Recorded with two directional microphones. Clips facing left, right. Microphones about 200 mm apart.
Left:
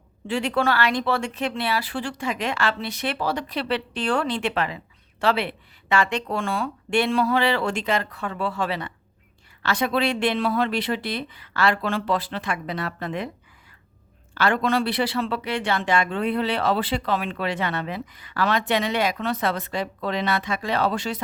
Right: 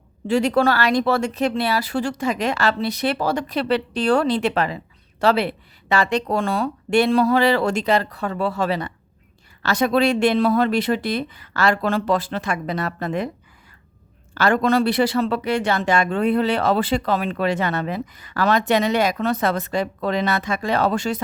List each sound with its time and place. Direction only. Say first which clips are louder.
0.3 s speech: right 5 dB; 40° right (ahead or behind)
14.3 s speech: right 4 dB; 45° right (ahead or behind)